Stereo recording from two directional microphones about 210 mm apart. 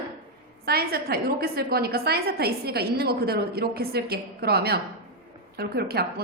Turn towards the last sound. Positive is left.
turn(degrees=-50)  # may be behind; listen again after turning